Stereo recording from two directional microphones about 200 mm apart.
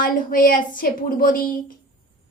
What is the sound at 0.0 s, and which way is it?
A woman's voice, 45° left (ahead or behind).